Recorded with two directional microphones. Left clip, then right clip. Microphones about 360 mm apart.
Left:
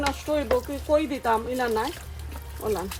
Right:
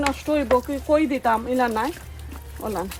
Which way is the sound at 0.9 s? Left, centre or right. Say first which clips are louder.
Right 3 dB; centre.